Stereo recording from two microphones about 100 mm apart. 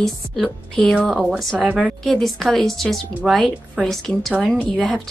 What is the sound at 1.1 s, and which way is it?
Speech, 10° right (ahead or behind).